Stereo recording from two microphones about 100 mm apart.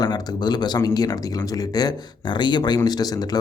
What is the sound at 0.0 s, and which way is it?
Speech, 45° left (ahead or behind).